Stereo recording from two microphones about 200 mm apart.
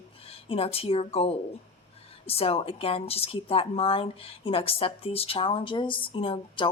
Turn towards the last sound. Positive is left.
turn(degrees=25)  # may be behind; listen again after turning